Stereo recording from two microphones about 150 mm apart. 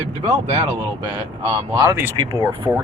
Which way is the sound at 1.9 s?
15° right (ahead or behind).